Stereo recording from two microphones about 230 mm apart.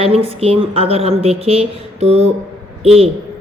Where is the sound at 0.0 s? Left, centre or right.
Right.